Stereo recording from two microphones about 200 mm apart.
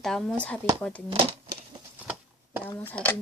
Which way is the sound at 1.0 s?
25° right (ahead or behind).